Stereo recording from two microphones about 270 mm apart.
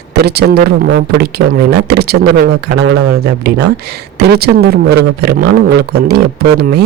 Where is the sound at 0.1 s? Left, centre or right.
Right.